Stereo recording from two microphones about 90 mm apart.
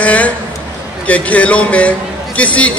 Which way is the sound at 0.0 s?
15° left (ahead or behind).